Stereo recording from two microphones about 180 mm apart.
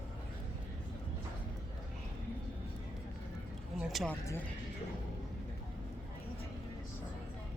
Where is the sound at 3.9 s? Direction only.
Centre (ahead or behind).